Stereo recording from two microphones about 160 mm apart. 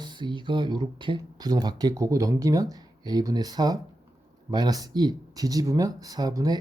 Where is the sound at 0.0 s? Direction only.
30° right (ahead or behind).